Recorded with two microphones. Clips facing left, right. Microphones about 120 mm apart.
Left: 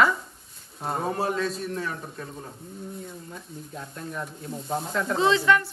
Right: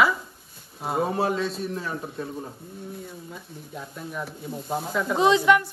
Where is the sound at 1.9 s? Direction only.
15° right (ahead or behind).